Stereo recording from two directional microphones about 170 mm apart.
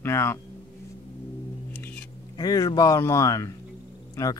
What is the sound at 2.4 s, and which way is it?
Speech, 20° left (ahead or behind).